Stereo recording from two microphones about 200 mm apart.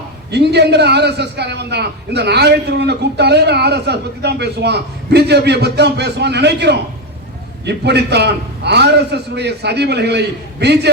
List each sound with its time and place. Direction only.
0.3 s a man's voice: 55° right (ahead or behind)